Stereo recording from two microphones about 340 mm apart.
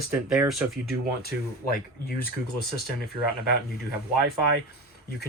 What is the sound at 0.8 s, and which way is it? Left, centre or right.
Speech, left.